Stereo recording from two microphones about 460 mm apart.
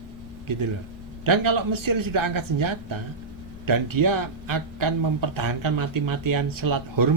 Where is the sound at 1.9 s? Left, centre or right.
Right.